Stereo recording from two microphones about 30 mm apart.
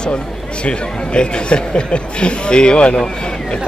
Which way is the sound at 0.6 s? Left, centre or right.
Left.